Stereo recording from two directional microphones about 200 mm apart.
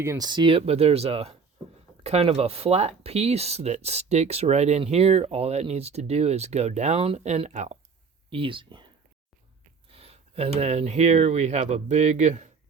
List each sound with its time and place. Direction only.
0.0 s speech: 15° right (ahead or behind)
9.9 s speech: 30° right (ahead or behind)